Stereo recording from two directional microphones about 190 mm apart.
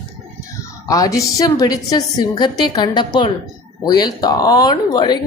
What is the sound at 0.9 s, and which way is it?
Speech, 20° left (ahead or behind).